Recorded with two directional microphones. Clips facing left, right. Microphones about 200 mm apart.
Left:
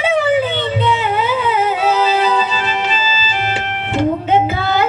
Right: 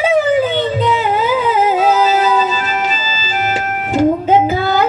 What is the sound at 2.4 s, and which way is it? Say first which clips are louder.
Organ: right 2 dB; 45° right (ahead or behind).